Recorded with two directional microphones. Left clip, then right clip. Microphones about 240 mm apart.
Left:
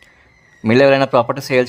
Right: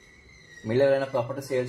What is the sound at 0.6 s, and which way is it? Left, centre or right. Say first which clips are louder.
Speech: left 11 dB; left.